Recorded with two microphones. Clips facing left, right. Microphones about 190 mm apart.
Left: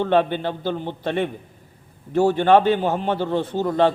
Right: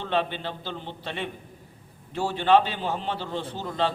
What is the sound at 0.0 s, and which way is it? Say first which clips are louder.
A man's voice: left 8 dB; 50° left (ahead or behind).